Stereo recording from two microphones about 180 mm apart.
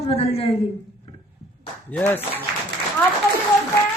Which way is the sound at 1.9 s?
10° left (ahead or behind).